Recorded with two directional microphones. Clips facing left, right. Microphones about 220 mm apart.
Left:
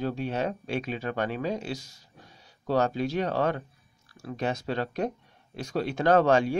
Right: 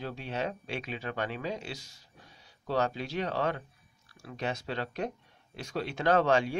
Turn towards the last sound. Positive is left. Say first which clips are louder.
# left 4 dB
turn(degrees=45)  # may be behind; listen again after turning